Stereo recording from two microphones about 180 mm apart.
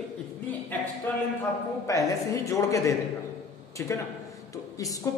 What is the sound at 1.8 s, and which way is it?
A man's voice, 15° left (ahead or behind).